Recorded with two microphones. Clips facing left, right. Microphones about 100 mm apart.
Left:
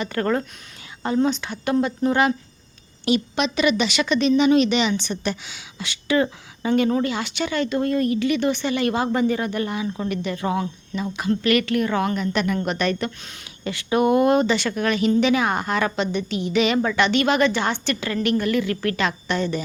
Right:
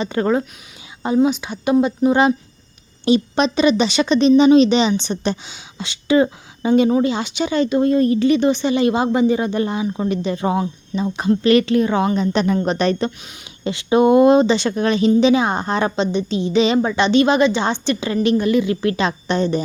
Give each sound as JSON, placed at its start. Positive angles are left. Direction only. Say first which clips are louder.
{"t": 0.0, "sound": "speech", "louder": "right 4 dB", "side_deg": -20}
{"t": 3.0, "sound": "speech", "louder": "right 5 dB", "side_deg": -30}